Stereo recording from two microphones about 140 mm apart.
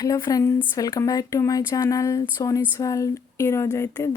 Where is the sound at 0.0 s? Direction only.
25° left (ahead or behind).